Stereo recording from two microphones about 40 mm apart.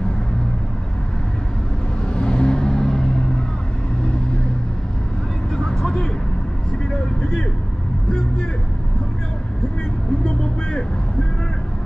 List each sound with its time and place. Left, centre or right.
2.1 s vehicle: left
5.6 s vehicle: centre
10.2 s vehicle: centre